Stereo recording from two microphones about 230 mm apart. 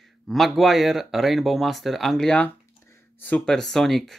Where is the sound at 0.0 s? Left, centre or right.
Centre.